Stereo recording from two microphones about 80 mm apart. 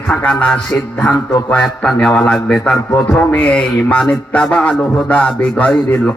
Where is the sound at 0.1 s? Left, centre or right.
Centre.